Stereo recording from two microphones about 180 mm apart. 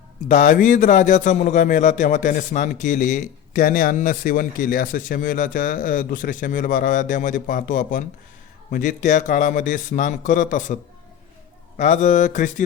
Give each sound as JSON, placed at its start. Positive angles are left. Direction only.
{"t": 0.3, "sound": "a man's voice", "side_deg": 45}
{"t": 11.8, "sound": "a man's voice", "side_deg": 40}